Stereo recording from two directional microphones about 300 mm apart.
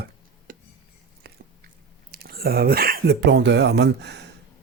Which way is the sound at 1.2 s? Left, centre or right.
Right.